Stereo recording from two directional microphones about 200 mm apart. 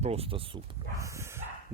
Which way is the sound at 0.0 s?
30° right (ahead or behind).